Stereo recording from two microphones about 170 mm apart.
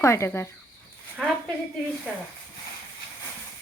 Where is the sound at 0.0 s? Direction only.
15° left (ahead or behind).